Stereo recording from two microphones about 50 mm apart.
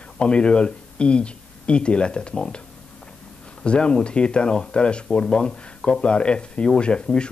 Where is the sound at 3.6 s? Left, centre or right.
Centre.